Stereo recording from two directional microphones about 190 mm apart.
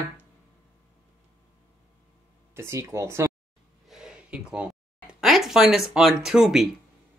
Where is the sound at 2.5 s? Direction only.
15° right (ahead or behind).